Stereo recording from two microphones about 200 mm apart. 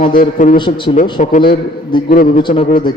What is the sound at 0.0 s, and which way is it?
Speech, 40° left (ahead or behind).